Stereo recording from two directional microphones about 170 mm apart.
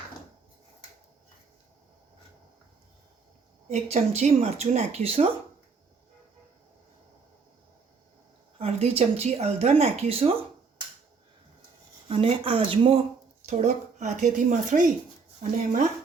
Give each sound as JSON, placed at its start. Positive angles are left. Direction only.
{"t": 3.7, "sound": "speech", "side_deg": -40}
{"t": 8.5, "sound": "speech", "side_deg": -35}
{"t": 12.0, "sound": "speech", "side_deg": -35}